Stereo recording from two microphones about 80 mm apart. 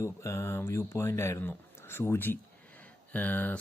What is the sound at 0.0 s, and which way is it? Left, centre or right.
Speech, left.